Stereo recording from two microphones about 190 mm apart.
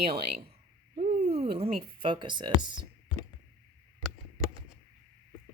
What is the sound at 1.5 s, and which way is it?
Speech, 30° right (ahead or behind).